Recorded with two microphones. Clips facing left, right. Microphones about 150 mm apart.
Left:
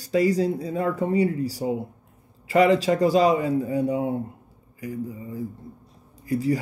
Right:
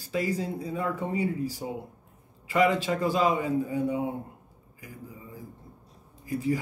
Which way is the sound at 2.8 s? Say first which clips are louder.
Left 6 dB; 80° left.